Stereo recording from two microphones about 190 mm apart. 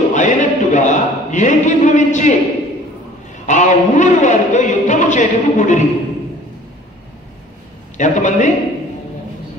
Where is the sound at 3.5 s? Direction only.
40° left (ahead or behind).